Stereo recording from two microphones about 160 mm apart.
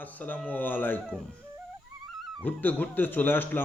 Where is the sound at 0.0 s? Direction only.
10° left (ahead or behind).